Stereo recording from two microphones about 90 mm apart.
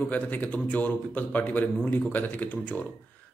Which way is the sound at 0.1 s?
20° left (ahead or behind).